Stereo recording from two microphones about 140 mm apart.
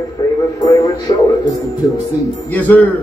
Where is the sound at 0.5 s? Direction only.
25° left (ahead or behind).